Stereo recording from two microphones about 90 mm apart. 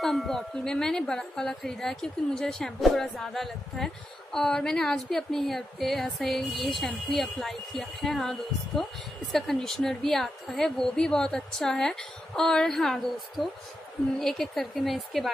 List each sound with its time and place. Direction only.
0.0 s speech: 5° left (ahead or behind)
9.3 s speech: 5° left (ahead or behind)